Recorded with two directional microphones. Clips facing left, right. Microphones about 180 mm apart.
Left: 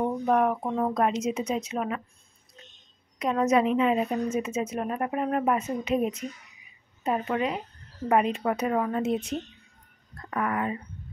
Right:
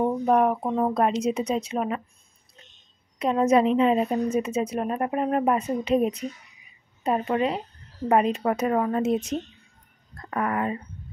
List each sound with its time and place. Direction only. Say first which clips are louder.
0.2 s speech: right 2 dB; 30° right (ahead or behind)
0.7 s speech: right 3 dB; 15° right (ahead or behind)
0.9 s a woman's voice: right 3 dB; 30° right (ahead or behind)
3.2 s a woman's voice: right 3 dB; 30° right (ahead or behind)